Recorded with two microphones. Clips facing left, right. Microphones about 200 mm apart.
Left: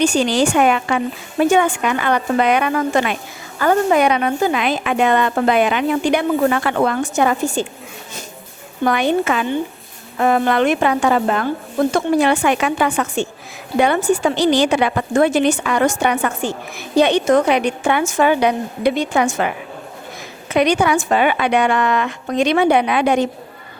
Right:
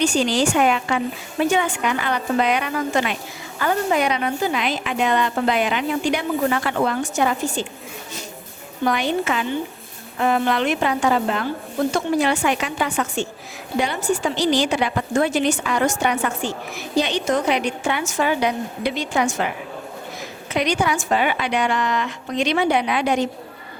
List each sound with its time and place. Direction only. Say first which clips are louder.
0.0 s a woman's voice: left 3 dB; 55° left (ahead or behind)
8.8 s a woman's voice: left 4 dB; 55° left (ahead or behind)
20.5 s a woman's voice: left 6 dB; 60° left (ahead or behind)